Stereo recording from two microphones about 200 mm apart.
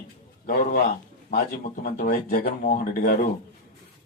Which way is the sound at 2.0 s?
50° left (ahead or behind).